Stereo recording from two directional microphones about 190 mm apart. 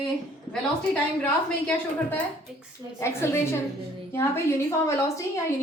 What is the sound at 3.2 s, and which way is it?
A woman's voice, 15° left (ahead or behind).